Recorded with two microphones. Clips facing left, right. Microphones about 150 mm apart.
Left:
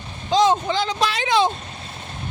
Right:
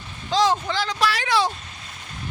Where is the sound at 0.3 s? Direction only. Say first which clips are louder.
Left 3 dB; 20° left (ahead or behind).